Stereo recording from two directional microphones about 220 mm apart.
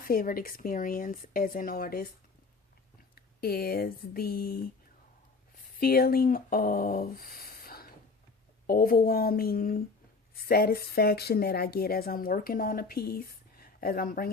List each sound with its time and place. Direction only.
0.1 s speech: 40° left (ahead or behind)
3.2 s speech: 45° left (ahead or behind)
5.8 s speech: 45° left (ahead or behind)